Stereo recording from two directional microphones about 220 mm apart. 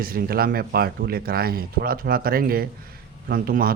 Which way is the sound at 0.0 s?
40° right (ahead or behind).